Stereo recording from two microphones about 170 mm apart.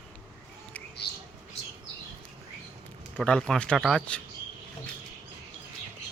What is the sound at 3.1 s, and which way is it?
Speech, 5° left (ahead or behind).